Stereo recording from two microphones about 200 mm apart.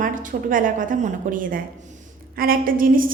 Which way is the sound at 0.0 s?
40° right (ahead or behind).